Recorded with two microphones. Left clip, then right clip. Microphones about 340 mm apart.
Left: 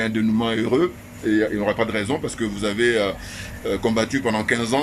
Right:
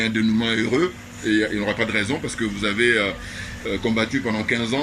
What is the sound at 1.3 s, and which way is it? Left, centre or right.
Speech, left.